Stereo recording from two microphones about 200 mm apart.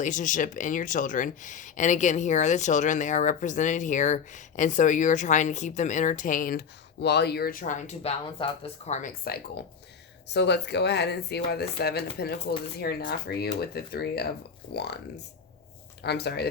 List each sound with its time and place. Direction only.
0.0 s speech: 40° left (ahead or behind)
10.3 s speech: 60° left (ahead or behind)